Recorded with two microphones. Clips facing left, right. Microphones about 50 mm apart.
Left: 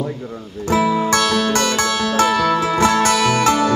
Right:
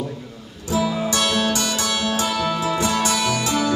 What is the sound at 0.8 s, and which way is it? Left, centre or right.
Music, left.